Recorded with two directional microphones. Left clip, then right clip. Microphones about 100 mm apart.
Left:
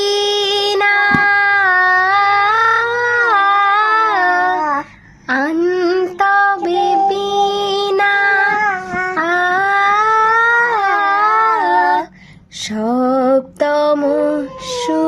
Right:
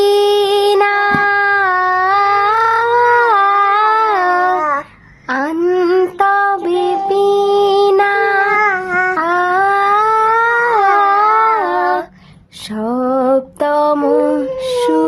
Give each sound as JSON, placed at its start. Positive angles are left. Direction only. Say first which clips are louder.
{"t": 0.0, "sound": "a sound", "louder": "right 4 dB", "side_deg": -25}
{"t": 5.6, "sound": "a sound", "louder": "right 3 dB", "side_deg": -35}
{"t": 6.2, "sound": "music", "louder": "left 4 dB", "side_deg": -25}
{"t": 8.6, "sound": "dog", "louder": "right 3 dB", "side_deg": -50}
{"t": 9.1, "sound": "cat", "louder": "left 3 dB", "side_deg": -20}
{"t": 12.8, "sound": "lullaby", "louder": "even", "side_deg": -10}
{"t": 13.2, "sound": "female singing", "louder": "even", "side_deg": -25}